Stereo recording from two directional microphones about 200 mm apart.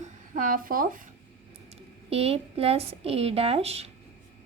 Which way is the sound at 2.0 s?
30° right (ahead or behind).